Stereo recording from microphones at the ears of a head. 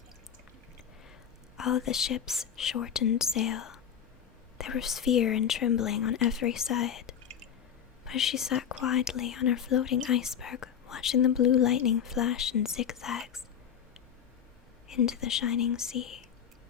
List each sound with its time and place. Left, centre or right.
1.5 s speech: left
14.8 s speech: left